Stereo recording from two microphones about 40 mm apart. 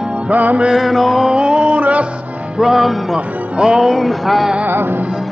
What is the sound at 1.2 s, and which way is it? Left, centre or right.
Music, right.